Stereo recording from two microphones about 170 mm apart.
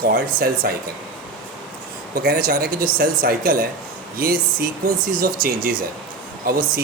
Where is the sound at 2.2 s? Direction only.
60° right (ahead or behind).